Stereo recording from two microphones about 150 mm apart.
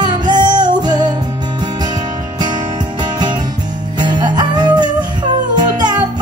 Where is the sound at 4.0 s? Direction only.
30° right (ahead or behind).